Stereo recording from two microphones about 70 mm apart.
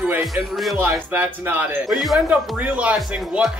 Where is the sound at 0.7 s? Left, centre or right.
Right.